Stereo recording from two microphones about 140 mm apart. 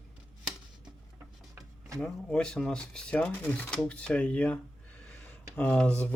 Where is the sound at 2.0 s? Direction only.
5° left (ahead or behind).